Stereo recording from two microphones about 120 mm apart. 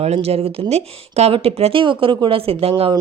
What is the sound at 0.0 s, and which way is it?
Speech, 60° right (ahead or behind).